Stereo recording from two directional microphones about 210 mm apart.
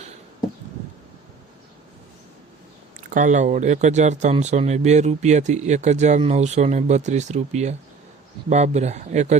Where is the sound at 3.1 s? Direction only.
35° right (ahead or behind).